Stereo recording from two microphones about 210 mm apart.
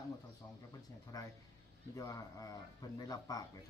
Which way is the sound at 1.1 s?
20° left (ahead or behind).